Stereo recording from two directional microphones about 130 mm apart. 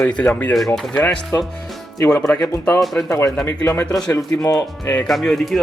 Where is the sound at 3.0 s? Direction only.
25° left (ahead or behind).